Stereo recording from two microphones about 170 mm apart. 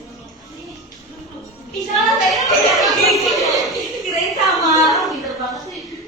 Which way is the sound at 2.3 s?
Centre (ahead or behind).